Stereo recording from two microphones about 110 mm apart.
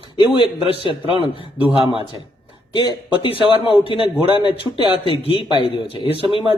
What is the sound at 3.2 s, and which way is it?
A man's voice, 50° left (ahead or behind).